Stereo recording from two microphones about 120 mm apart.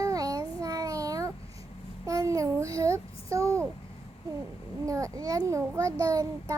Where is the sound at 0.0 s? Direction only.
30° right (ahead or behind).